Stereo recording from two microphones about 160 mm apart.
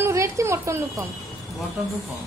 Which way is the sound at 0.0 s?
15° right (ahead or behind).